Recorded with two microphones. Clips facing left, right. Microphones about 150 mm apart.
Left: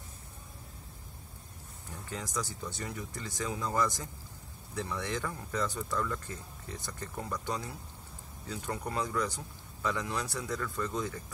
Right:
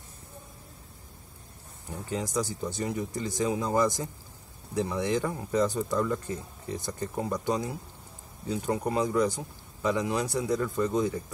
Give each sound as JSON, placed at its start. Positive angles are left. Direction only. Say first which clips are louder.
{"t": 2.0, "sound": "speech", "louder": "right 7 dB", "side_deg": -20}